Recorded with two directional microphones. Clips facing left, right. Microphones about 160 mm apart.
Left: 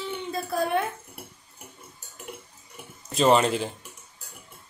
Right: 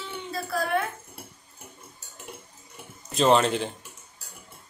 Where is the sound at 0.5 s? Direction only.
15° left (ahead or behind).